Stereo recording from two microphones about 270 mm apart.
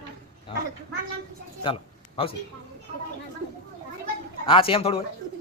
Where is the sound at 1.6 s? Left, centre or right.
Left.